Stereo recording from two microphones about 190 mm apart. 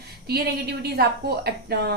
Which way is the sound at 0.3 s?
55° right (ahead or behind).